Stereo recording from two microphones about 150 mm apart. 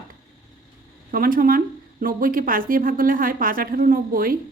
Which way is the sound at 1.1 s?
70° right (ahead or behind).